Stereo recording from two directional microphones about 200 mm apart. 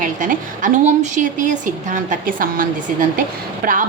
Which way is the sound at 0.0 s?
40° right (ahead or behind).